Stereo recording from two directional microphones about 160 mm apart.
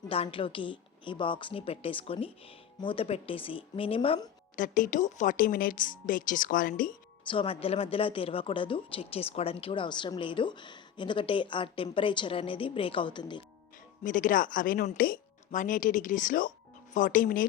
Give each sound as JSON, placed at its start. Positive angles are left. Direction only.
{"t": 0.1, "sound": "speech", "side_deg": 35}
{"t": 4.5, "sound": "a woman's voice", "side_deg": 55}
{"t": 7.3, "sound": "speech", "side_deg": 35}
{"t": 14.0, "sound": "a woman's voice", "side_deg": 55}